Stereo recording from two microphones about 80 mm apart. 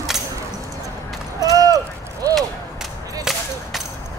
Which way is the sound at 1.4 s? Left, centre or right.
Right.